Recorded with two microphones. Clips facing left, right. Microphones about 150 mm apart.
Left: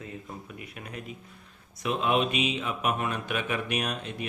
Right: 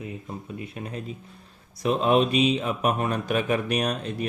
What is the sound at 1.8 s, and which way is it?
Music, 35° right (ahead or behind).